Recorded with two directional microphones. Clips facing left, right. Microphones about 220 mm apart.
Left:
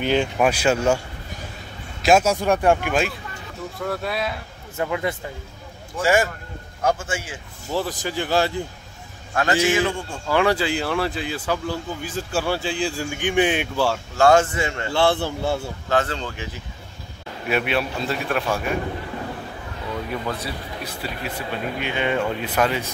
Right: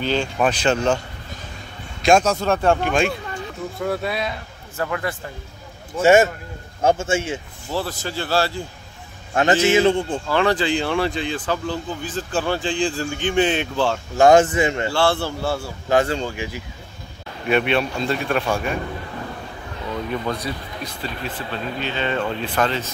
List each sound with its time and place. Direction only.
0.0 s speech: 15° left (ahead or behind)
2.0 s a man's voice: 5° left (ahead or behind)
4.7 s speech: 20° left (ahead or behind)
5.9 s speech: 25° right (ahead or behind)
7.7 s speech: 15° left (ahead or behind)
9.3 s speech: 20° right (ahead or behind)
10.2 s speech: 10° left (ahead or behind)
14.1 s speech: 15° right (ahead or behind)
14.9 s speech: 20° left (ahead or behind)
15.9 s speech: 15° right (ahead or behind)
17.5 s a man's voice: 5° left (ahead or behind)
20.4 s speech: 10° left (ahead or behind)